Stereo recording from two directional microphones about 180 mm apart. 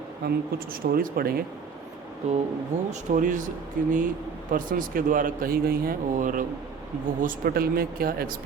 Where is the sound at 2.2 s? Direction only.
40° right (ahead or behind).